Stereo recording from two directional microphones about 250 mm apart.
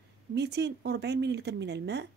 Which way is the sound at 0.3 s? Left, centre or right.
Right.